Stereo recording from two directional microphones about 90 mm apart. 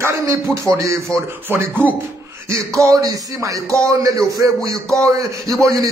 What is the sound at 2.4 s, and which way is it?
A man's voice, 35° right (ahead or behind).